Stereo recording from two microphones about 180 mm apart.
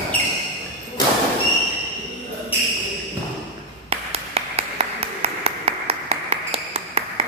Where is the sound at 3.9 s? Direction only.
35° right (ahead or behind).